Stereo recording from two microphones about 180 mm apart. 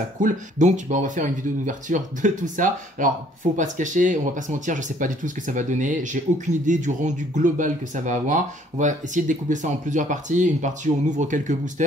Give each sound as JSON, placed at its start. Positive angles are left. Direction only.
{"t": 0.2, "sound": "speech", "side_deg": -45}